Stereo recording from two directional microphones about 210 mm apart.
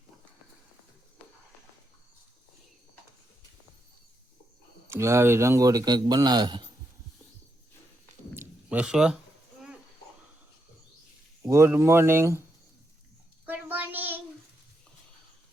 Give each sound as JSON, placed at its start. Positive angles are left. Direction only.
{"t": 4.9, "sound": "a man's voice", "side_deg": -15}
{"t": 8.4, "sound": "a sound", "side_deg": -5}
{"t": 11.4, "sound": "a man's voice", "side_deg": -15}
{"t": 13.4, "sound": "child singing", "side_deg": -10}